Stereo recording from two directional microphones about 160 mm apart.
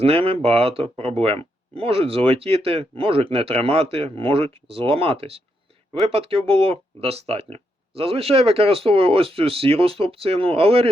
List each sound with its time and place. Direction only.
0.0 s speech: 35° right (ahead or behind)